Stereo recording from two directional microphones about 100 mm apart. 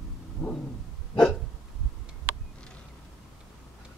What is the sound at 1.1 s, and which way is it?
Hiccup, 10° left (ahead or behind).